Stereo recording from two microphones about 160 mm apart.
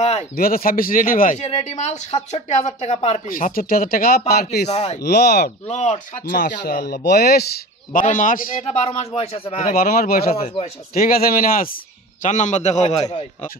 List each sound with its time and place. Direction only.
0.4 s speech: 65° left (ahead or behind); by 3.2 s 40° left (ahead or behind)
3.3 s speech: 60° left (ahead or behind)
4.6 s speech: 45° left (ahead or behind)
5.0 s speech: 90° left
5.7 s speech: 50° left (ahead or behind); by 7.4 s 85° left
7.9 s speech: 55° left (ahead or behind)
8.6 s speech: 40° left (ahead or behind)
9.8 s speech: 70° left (ahead or behind)
10.3 s speech: 40° left (ahead or behind)
11.0 s speech: 65° left (ahead or behind); by 13.1 s 45° left (ahead or behind)